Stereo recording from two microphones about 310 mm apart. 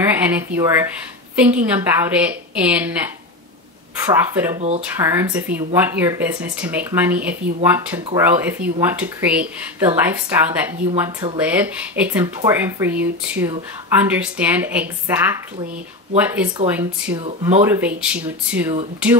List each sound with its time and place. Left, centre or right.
0.1 s speech: centre
4.0 s speech: centre
4.6 s speech: right
4.9 s speech: centre